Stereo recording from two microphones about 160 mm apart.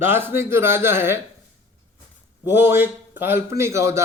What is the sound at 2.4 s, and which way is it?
A man's voice, 15° right (ahead or behind).